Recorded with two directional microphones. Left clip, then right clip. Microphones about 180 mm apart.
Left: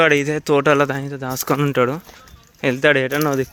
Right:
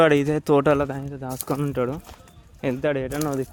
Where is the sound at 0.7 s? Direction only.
10° left (ahead or behind).